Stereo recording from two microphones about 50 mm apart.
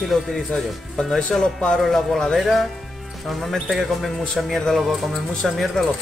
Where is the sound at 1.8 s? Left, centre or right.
Centre.